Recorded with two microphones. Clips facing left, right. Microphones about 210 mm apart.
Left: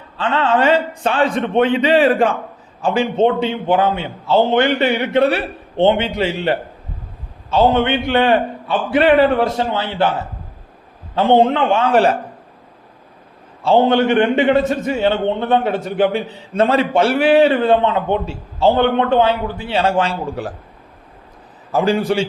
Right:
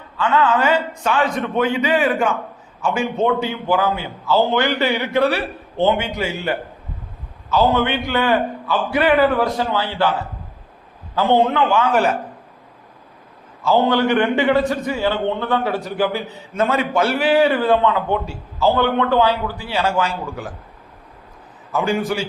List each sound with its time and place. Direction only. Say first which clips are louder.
0.2 s a man's voice: left 1 dB; 30° left (ahead or behind)
13.6 s a man's voice: left 3 dB; 30° left (ahead or behind)
21.7 s a man's voice: left 4 dB; 35° left (ahead or behind)